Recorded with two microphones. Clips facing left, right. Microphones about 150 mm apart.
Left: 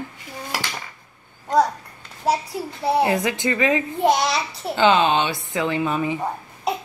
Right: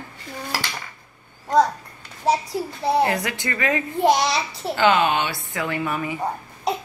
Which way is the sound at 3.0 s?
20° left (ahead or behind).